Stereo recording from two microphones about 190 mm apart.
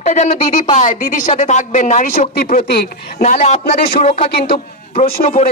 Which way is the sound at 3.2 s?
35° left (ahead or behind).